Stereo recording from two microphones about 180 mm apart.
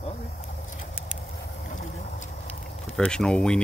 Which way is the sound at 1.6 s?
45° left (ahead or behind).